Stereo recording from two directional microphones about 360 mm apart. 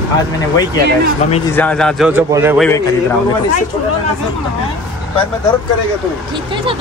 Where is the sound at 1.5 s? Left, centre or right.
Centre.